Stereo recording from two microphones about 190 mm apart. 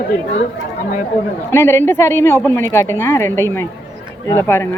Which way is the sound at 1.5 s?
15° left (ahead or behind).